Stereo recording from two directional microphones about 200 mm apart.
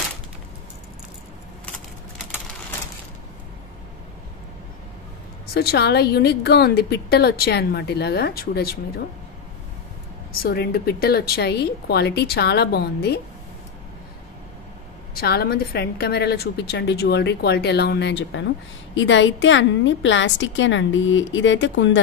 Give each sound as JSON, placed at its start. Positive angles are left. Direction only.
{"t": 5.5, "sound": "a woman's voice", "side_deg": 50}
{"t": 10.4, "sound": "a woman's voice", "side_deg": 50}
{"t": 15.1, "sound": "a woman's voice", "side_deg": 50}